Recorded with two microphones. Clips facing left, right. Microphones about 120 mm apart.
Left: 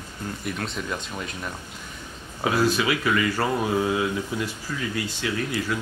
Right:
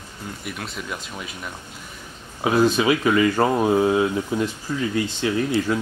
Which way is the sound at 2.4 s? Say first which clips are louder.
Right 4 dB; 20° right (ahead or behind).